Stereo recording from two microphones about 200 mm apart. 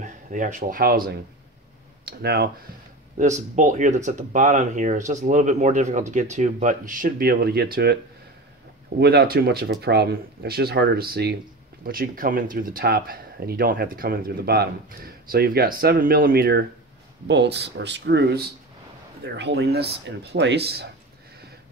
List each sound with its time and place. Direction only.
0.0 s speech: 40° right (ahead or behind)
3.2 s speech: 40° right (ahead or behind)
9.0 s speech: 50° right (ahead or behind)